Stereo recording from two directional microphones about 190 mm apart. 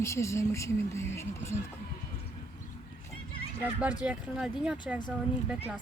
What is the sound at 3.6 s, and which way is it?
Speech, 10° right (ahead or behind).